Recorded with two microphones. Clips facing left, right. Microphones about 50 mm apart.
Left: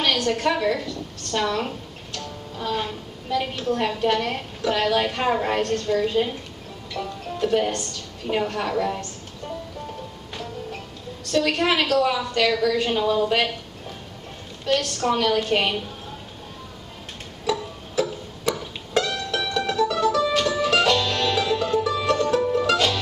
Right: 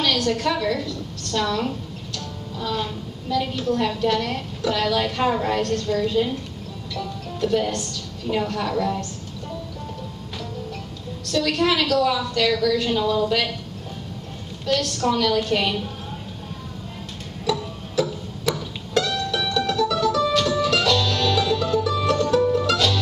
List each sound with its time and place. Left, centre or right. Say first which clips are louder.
0.0 s a woman's voice: even; left
1.3 s music: right 1 dB; centre
3.6 s a woman's voice: even; left
6.9 s music: left 1 dB; left
8.3 s a woman's voice: even; left
11.3 s a woman's voice: even; left
14.7 s a woman's voice: even; left
17.5 s music: right 1 dB; centre
19.0 s music: right 2 dB; left
20.3 s music: even; left